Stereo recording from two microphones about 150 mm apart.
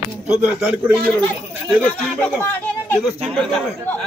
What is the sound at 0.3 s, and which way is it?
Speech, 10° right (ahead or behind).